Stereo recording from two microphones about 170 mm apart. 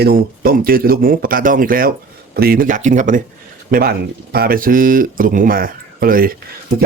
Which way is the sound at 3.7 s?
60° right (ahead or behind).